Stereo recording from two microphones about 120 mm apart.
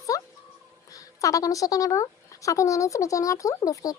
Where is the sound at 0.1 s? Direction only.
30° left (ahead or behind).